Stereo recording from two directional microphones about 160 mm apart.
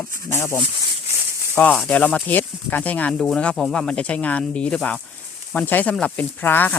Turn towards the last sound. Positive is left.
turn(degrees=10)  # may be behind; listen again after turning